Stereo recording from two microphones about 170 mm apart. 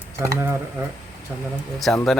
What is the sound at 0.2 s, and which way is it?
Speech, 15° right (ahead or behind).